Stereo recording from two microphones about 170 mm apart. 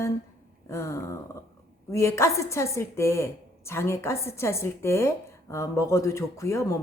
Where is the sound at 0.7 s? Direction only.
15° left (ahead or behind).